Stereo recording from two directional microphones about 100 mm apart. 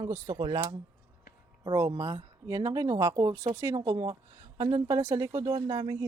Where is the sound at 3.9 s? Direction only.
45° right (ahead or behind).